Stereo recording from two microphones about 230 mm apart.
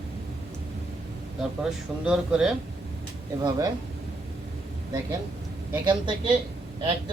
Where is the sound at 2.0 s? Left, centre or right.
Centre.